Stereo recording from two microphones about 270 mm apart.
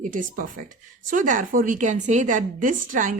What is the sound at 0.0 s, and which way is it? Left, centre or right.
A woman's voice, right.